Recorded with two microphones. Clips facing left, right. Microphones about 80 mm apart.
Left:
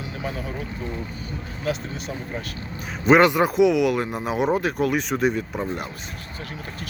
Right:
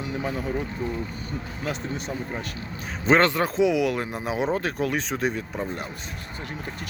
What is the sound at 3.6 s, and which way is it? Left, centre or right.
Speech, centre.